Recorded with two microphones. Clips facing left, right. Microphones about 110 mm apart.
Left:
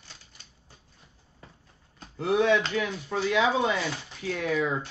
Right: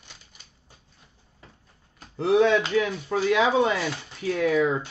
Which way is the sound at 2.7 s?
40° right (ahead or behind).